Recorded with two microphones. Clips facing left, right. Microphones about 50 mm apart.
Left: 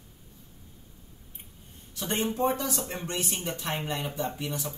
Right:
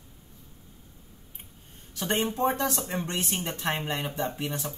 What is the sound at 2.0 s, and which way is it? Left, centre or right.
Speech, right.